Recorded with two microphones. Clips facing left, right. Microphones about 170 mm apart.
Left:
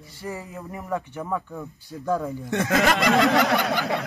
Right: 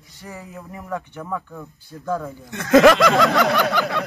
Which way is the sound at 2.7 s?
90° right.